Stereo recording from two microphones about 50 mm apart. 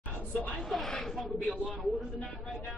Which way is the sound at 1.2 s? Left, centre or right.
Centre.